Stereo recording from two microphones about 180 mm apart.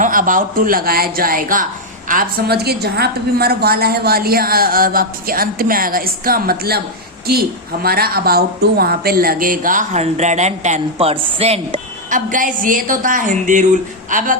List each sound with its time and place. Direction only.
0.0 s a woman's voice: 50° right (ahead or behind)